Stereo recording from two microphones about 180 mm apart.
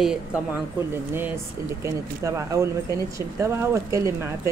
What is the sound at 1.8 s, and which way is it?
Speech, 15° right (ahead or behind).